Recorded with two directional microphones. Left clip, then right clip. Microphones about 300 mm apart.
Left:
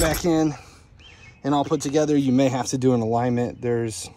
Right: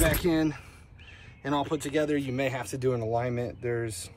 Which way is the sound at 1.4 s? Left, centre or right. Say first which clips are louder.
Left 7 dB; centre.